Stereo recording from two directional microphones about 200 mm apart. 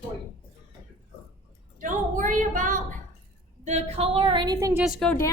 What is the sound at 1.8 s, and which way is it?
A woman's voice, 40° right (ahead or behind).